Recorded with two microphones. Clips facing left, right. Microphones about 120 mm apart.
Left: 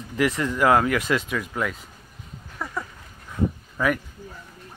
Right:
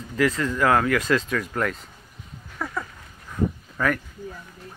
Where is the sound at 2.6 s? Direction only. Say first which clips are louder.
Right 2 dB; 15° left (ahead or behind).